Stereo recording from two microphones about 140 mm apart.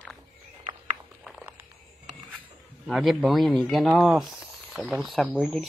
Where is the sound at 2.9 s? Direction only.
5° right (ahead or behind).